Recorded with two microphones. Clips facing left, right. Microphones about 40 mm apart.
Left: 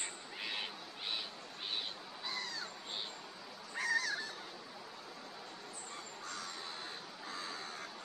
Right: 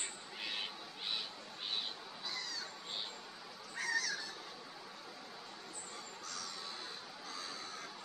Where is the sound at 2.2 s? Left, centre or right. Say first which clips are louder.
Left 2 dB; left.